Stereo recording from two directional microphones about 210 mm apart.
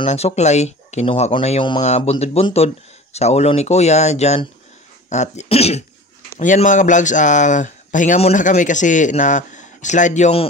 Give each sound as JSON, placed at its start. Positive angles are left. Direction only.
{"t": 0.0, "sound": "speech", "side_deg": 30}